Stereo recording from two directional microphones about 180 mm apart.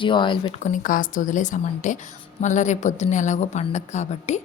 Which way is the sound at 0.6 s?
45° left (ahead or behind).